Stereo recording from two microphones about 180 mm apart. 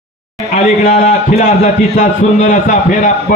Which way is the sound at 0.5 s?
40° left (ahead or behind).